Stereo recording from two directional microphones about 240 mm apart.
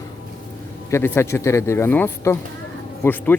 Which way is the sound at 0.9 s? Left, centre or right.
Centre.